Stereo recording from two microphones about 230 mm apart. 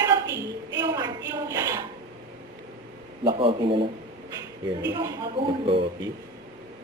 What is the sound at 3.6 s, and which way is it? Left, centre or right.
Speech, right.